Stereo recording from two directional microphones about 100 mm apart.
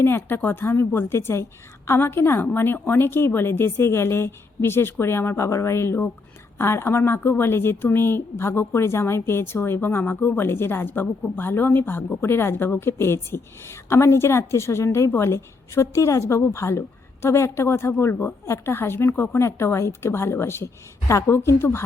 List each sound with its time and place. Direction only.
0.0 s a woman's voice: 20° left (ahead or behind)